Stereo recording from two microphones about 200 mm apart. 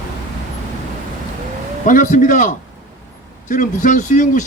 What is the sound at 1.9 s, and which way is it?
Speech, 40° left (ahead or behind).